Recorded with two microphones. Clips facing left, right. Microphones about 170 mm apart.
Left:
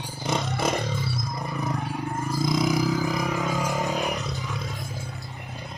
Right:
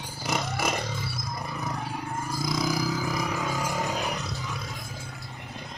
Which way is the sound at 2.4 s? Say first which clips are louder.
Left 5 dB; 25° left (ahead or behind).